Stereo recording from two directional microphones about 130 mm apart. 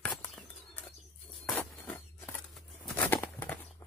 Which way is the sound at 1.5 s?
5° left (ahead or behind).